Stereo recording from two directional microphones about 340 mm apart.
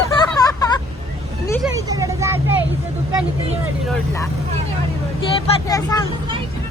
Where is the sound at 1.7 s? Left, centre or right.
Centre.